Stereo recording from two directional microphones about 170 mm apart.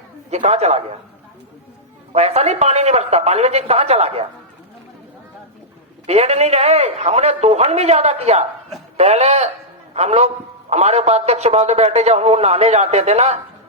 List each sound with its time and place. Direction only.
0.3 s a man's voice: 40° right (ahead or behind)
2.1 s a man's voice: 40° right (ahead or behind)
6.1 s a man's voice: 40° right (ahead or behind)